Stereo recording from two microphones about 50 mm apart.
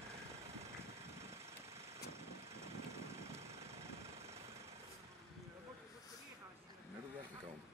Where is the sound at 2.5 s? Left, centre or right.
Right.